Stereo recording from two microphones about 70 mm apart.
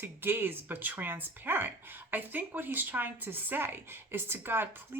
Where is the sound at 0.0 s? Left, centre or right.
Right.